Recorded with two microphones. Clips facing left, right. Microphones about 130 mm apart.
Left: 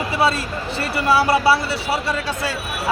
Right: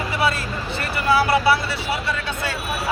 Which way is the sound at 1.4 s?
30° left (ahead or behind).